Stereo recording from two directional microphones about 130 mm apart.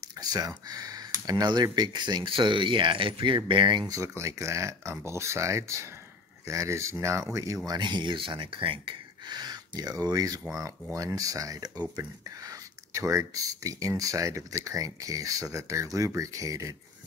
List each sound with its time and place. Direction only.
0.2 s speech: 30° right (ahead or behind)
3.9 s speech: 25° right (ahead or behind)